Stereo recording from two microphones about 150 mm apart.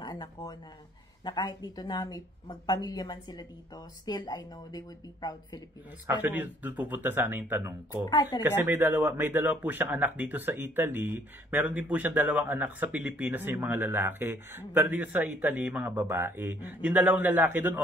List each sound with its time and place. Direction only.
0.0 s a woman's voice: 30° left (ahead or behind)
6.0 s speech: 10° right (ahead or behind)
8.1 s a woman's voice: 25° left (ahead or behind)
8.4 s speech: 10° right (ahead or behind)